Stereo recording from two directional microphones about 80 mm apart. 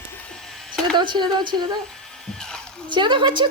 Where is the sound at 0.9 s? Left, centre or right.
Right.